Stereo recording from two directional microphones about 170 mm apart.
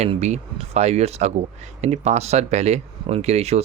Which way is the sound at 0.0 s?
40° right (ahead or behind).